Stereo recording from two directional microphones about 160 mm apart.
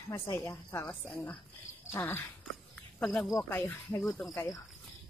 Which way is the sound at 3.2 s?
15° left (ahead or behind).